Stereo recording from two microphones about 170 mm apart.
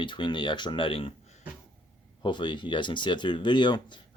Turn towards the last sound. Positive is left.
turn(degrees=25)  # may be behind; listen again after turning